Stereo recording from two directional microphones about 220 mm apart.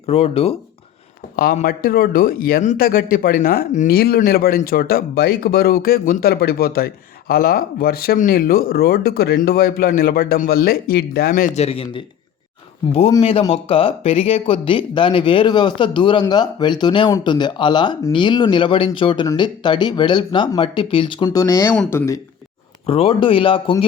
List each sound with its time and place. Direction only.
0.0 s speech: 30° left (ahead or behind)
1.4 s a man's voice: 40° left (ahead or behind); by 22.2 s 10° left (ahead or behind)
22.9 s speech: 25° left (ahead or behind)